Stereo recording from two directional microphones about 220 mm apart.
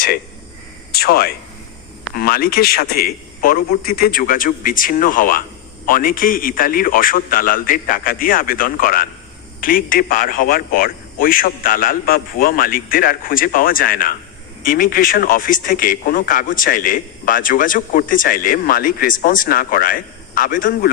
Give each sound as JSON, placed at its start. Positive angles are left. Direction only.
{"t": 0.9, "sound": "a man's voice", "side_deg": 45}